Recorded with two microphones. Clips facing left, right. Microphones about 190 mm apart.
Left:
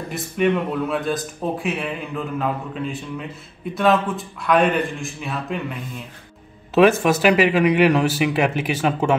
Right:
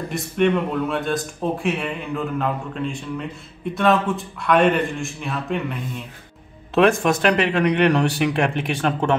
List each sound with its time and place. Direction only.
0.1 s speech: centre (ahead or behind)